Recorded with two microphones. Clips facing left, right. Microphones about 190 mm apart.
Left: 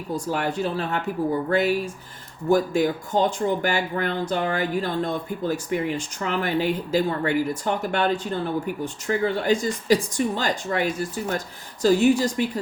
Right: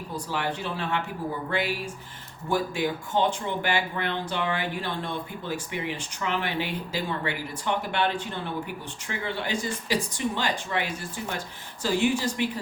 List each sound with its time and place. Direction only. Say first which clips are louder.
0.3 s speech: left 5 dB; 45° left (ahead or behind)